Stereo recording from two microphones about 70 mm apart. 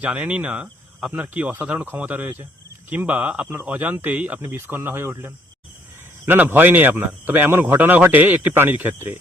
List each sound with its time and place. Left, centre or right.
0.0 s speech: centre
4.4 s speech: right